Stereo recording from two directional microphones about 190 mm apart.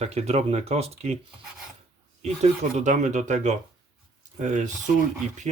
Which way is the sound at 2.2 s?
35° right (ahead or behind).